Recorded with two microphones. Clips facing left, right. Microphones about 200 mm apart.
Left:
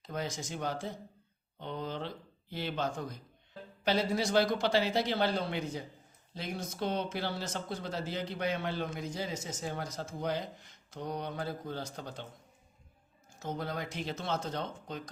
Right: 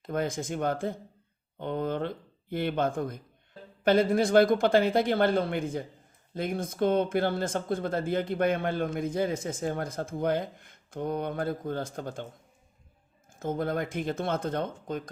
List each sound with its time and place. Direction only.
0.0 s speech: 55° right (ahead or behind)
13.3 s speech: 50° right (ahead or behind)